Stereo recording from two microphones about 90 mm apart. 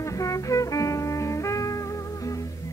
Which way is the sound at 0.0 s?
35° left (ahead or behind).